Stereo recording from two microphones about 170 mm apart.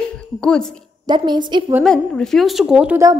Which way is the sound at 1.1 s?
25° right (ahead or behind).